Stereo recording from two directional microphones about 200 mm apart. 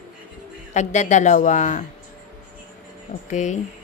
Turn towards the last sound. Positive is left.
turn(degrees=35)  # may be behind; listen again after turning